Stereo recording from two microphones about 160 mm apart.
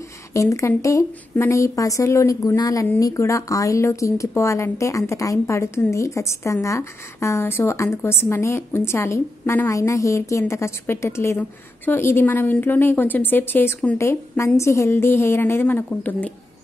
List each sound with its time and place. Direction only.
0.3 s a woman's voice: 20° left (ahead or behind)